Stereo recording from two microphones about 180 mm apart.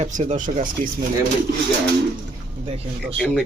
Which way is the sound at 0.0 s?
40° right (ahead or behind).